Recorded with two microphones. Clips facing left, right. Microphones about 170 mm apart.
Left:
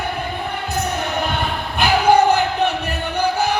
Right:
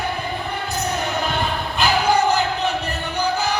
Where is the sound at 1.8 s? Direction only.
60° left (ahead or behind).